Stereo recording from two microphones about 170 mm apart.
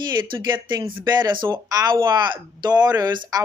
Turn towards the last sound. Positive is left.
turn(degrees=-25)  # may be behind; listen again after turning